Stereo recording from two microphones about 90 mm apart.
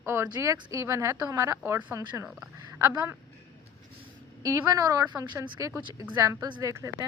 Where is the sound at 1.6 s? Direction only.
20° right (ahead or behind).